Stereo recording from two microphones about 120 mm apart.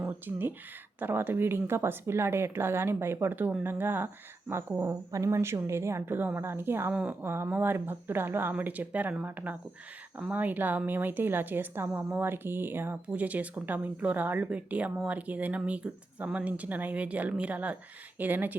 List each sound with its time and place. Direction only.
0.0 s speech: 15° right (ahead or behind)